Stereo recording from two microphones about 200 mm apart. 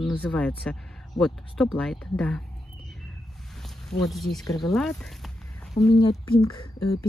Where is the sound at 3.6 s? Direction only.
Centre (ahead or behind).